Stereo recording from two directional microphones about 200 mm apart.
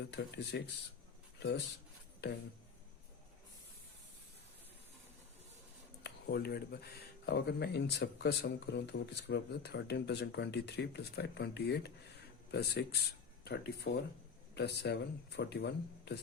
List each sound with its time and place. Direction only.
0.1 s speech: 60° left (ahead or behind)
6.0 s speech: 55° left (ahead or behind)